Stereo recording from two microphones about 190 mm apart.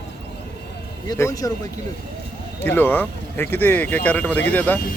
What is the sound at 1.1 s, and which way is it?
Speech, 15° left (ahead or behind).